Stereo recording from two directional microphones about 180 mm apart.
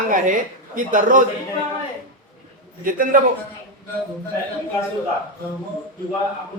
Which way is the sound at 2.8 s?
50° right (ahead or behind).